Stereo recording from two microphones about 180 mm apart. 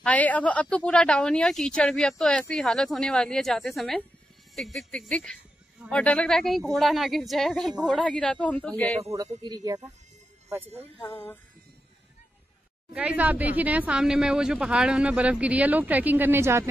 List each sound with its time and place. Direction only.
0.0 s a woman's voice: 10° left (ahead or behind)
9.4 s speech: 20° right (ahead or behind)
11.0 s speech: 10° left (ahead or behind)
12.9 s speech: 5° right (ahead or behind)